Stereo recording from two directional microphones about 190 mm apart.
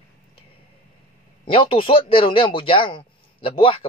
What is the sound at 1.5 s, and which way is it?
A man's voice, 30° left (ahead or behind).